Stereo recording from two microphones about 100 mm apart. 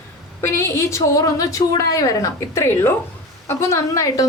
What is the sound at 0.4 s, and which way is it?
A woman's voice, 25° left (ahead or behind).